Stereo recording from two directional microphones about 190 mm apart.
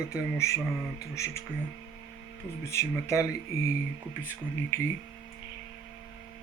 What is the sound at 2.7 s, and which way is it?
Speech, 15° left (ahead or behind).